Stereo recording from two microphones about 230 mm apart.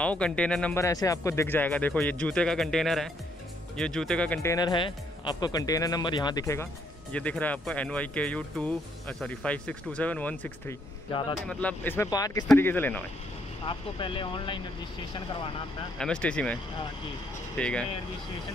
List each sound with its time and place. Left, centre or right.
0.0 s speech: centre
13.7 s speech: left
16.0 s speech: centre
17.6 s speech: centre